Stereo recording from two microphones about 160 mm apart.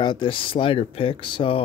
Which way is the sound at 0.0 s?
30° left (ahead or behind).